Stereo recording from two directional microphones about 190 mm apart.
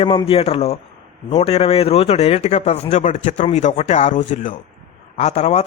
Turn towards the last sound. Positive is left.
turn(degrees=35)  # may be behind; listen again after turning